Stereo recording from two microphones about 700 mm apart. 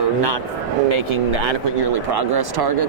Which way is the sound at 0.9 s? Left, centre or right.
Right.